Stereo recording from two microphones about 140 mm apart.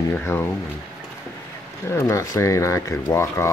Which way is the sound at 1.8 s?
15° left (ahead or behind).